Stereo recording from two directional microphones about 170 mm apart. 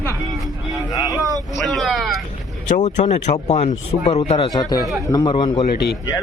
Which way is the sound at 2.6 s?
40° left (ahead or behind).